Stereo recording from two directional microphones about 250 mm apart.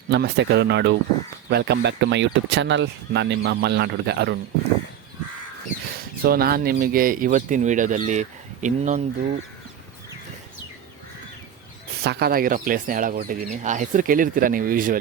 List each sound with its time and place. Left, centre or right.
0.1 s speech: right
6.2 s speech: right
12.0 s speech: right